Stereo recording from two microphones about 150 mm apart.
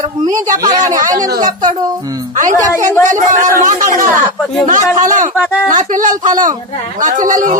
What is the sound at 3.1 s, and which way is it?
A man's voice, 60° right (ahead or behind).